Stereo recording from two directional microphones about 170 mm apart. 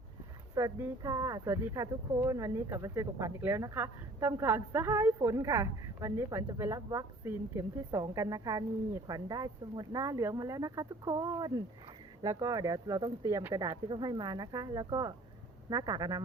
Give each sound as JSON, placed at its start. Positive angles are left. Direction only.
{"t": 0.5, "sound": "speech", "side_deg": -15}